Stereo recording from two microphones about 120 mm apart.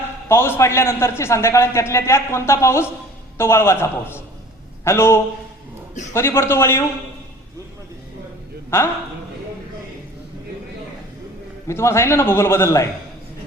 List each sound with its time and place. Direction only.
0.3 s a man's voice: 20° left (ahead or behind)
8.7 s a man's voice: 20° left (ahead or behind)
11.7 s a man's voice: 20° left (ahead or behind)